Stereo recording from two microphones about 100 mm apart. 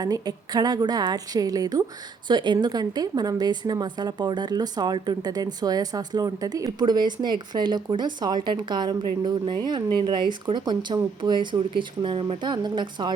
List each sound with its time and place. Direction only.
0.0 s a woman's voice: 40° right (ahead or behind)
2.2 s a woman's voice: 50° right (ahead or behind)